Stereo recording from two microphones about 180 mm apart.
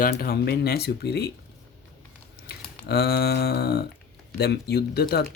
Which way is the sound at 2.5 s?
60° left (ahead or behind).